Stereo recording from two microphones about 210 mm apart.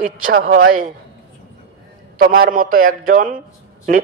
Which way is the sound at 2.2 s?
45° right (ahead or behind).